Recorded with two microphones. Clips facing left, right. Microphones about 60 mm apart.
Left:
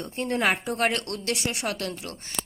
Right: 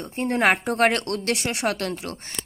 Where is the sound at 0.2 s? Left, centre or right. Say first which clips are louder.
Right 4 dB; right.